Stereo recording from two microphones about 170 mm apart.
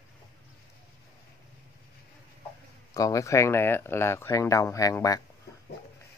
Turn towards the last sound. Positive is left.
turn(degrees=20)  # may be behind; listen again after turning